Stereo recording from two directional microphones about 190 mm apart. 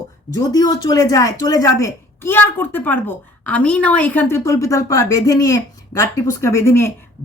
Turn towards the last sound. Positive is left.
turn(degrees=15)  # may be behind; listen again after turning